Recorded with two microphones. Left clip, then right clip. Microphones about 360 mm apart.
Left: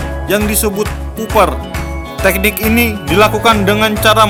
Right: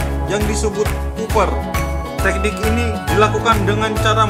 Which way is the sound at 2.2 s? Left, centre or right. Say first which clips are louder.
Left 6 dB; left.